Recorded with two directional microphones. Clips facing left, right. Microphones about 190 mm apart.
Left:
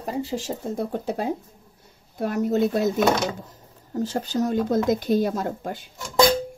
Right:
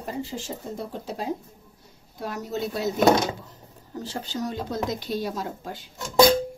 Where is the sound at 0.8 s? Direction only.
55° left (ahead or behind).